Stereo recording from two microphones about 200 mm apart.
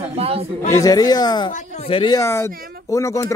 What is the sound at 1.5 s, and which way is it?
Speech, 35° left (ahead or behind).